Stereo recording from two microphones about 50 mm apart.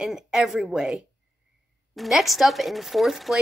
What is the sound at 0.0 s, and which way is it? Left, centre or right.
Speech, centre.